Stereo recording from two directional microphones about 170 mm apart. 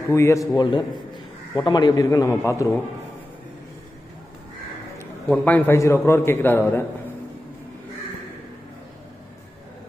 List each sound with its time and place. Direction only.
0.1 s a man's voice: 15° left (ahead or behind)
4.9 s a man's voice: 10° left (ahead or behind)